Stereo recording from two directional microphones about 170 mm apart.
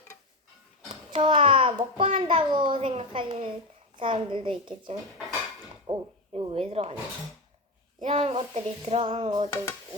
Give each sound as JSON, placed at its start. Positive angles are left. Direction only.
{"t": 1.1, "sound": "a child's voice", "side_deg": -30}
{"t": 8.0, "sound": "a child's voice", "side_deg": -35}